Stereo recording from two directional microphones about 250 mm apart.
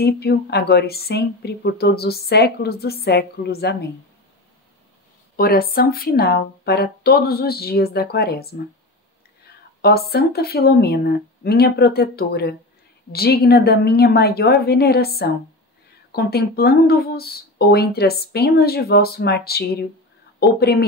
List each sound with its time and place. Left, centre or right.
0.0 s speech: left
5.3 s speech: left
9.8 s speech: left